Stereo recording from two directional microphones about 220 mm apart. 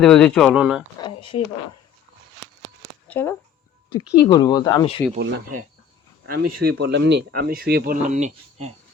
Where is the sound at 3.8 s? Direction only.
90° left.